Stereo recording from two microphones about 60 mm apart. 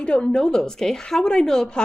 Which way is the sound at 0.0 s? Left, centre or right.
Centre.